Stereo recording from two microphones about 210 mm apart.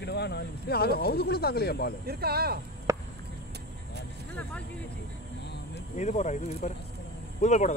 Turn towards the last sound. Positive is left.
turn(degrees=35)  # may be behind; listen again after turning